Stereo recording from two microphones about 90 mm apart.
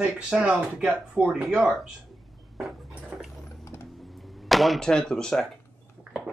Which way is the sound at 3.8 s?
Centre (ahead or behind).